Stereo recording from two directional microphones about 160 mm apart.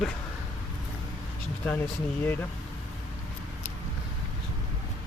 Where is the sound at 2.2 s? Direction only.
10° left (ahead or behind).